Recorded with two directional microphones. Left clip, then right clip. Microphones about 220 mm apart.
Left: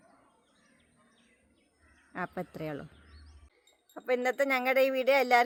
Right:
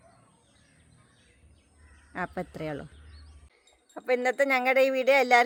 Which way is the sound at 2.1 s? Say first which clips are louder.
Right 3 dB; 5° left (ahead or behind).